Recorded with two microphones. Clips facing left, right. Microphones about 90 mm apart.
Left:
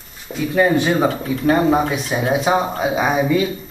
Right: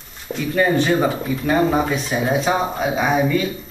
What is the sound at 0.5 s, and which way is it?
Speech, 15° left (ahead or behind).